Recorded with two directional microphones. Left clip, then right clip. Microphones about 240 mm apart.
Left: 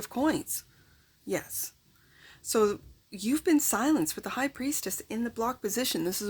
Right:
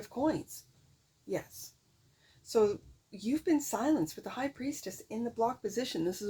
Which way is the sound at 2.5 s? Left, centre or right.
Left.